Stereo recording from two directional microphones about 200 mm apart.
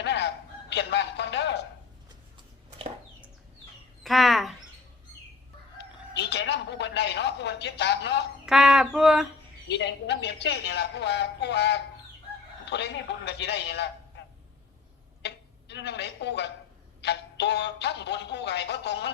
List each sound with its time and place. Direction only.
0.0 s fowl: 60° left (ahead or behind)
0.7 s a woman's voice: 60° left (ahead or behind)
4.0 s speech: centre (ahead or behind)
5.7 s chicken: 60° left (ahead or behind)
8.4 s a sound: centre (ahead or behind)
9.6 s a woman's voice: 60° left (ahead or behind)
15.2 s a sound: 60° left (ahead or behind)
17.0 s a woman's voice: 60° left (ahead or behind)